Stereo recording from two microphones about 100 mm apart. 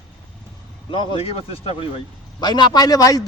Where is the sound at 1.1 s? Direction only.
75° left (ahead or behind).